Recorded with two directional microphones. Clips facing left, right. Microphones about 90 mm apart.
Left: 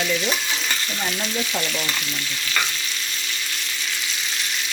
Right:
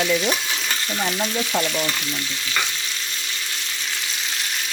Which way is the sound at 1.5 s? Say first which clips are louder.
Right 4 dB; 15° right (ahead or behind).